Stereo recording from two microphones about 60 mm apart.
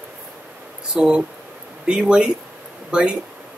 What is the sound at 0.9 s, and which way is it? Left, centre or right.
Speech, centre.